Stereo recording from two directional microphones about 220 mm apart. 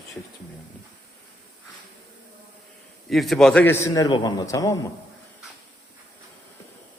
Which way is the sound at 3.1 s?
Centre (ahead or behind).